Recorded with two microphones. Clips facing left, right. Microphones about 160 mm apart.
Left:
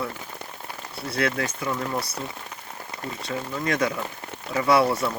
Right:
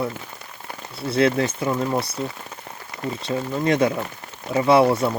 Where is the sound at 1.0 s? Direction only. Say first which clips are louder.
Right 7 dB; 25° right (ahead or behind).